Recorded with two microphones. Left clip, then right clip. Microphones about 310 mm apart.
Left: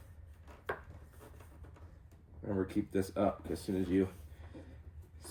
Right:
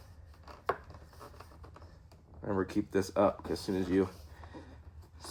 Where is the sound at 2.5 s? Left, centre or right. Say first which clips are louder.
Right 3 dB; right.